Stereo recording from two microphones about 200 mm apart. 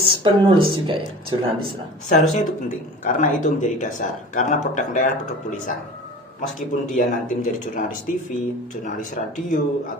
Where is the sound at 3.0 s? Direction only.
40° left (ahead or behind).